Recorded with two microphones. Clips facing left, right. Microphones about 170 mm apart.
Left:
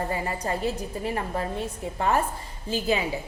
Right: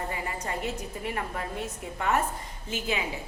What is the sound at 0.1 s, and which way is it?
A woman's voice, 35° left (ahead or behind).